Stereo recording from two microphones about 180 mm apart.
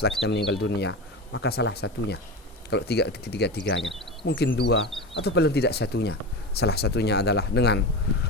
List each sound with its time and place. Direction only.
0.3 s speech: 75° left (ahead or behind)